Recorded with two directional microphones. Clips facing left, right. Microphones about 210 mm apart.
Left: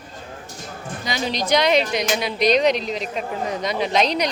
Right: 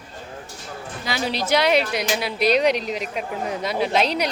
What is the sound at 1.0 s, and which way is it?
A woman's voice, 5° right (ahead or behind).